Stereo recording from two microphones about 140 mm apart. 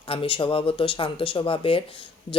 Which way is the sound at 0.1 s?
40° left (ahead or behind).